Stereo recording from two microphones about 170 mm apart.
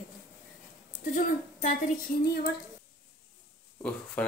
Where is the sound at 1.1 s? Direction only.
50° left (ahead or behind).